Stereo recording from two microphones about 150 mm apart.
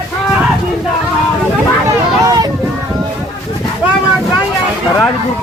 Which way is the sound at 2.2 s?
25° right (ahead or behind).